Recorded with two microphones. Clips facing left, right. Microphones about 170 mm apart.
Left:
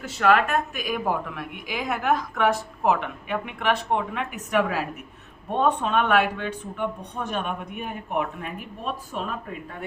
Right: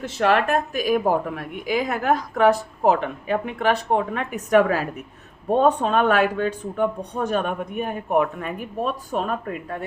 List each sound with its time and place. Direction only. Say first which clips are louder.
0.2 s a woman's voice: right 1 dB; 35° right (ahead or behind)